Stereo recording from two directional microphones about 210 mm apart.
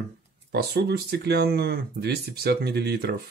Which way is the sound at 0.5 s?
50° right (ahead or behind).